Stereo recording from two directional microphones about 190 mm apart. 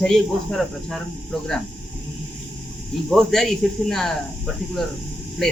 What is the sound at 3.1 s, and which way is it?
Speech, centre (ahead or behind).